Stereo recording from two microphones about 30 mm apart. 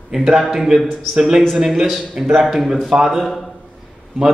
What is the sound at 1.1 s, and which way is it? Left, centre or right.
A man's voice, centre.